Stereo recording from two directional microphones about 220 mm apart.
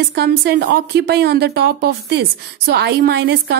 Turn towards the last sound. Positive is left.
turn(degrees=-50)  # may be behind; listen again after turning